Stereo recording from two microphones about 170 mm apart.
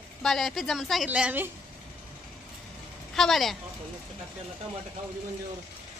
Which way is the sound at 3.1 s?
Centre (ahead or behind).